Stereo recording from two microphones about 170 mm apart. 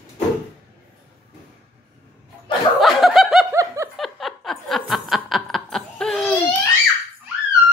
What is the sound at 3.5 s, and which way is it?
Laughter, 15° right (ahead or behind).